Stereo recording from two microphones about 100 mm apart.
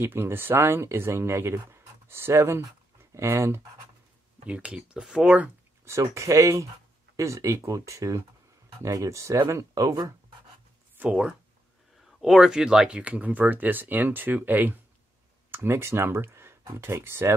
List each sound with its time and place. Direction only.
0.0 s speech: 20° right (ahead or behind)
4.5 s speech: 15° right (ahead or behind)
5.9 s speech: 30° right (ahead or behind)
11.0 s speech: 10° right (ahead or behind); by 17.3 s 25° right (ahead or behind)